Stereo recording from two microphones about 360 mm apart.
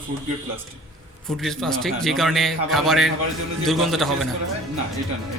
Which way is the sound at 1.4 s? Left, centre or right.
Centre.